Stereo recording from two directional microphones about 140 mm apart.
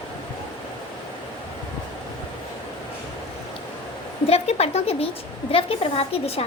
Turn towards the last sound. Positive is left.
turn(degrees=45)  # may be behind; listen again after turning